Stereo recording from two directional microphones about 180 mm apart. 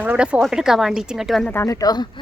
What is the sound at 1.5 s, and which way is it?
Speech, 15° left (ahead or behind).